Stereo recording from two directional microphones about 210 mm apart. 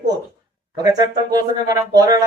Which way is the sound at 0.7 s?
20° right (ahead or behind).